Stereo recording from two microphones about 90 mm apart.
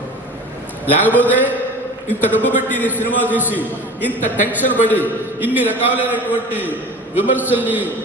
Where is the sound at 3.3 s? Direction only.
20° right (ahead or behind).